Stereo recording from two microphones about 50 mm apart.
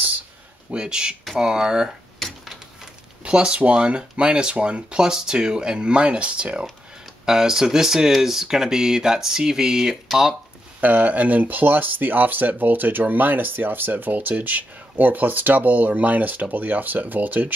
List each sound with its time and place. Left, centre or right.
0.7 s speech: centre
2.1 s a sound: centre
3.3 s speech: centre
7.2 s speech: centre
10.8 s speech: right